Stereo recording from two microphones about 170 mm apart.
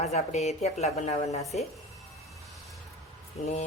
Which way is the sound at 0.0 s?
40° left (ahead or behind).